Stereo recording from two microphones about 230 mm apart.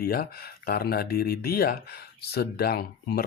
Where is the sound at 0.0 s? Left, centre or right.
Left.